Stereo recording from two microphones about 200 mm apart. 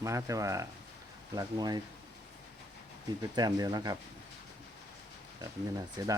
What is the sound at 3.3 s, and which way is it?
Speech, 20° right (ahead or behind).